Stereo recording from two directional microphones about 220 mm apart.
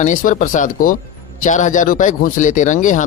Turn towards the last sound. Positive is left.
turn(degrees=35)  # may be behind; listen again after turning